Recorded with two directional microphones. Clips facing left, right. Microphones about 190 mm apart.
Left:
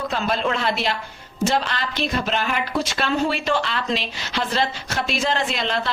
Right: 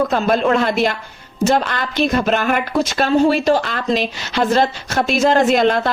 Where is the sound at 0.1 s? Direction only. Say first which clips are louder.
Right 7 dB; 50° right (ahead or behind).